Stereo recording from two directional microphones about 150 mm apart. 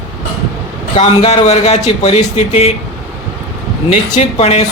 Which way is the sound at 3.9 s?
45° left (ahead or behind).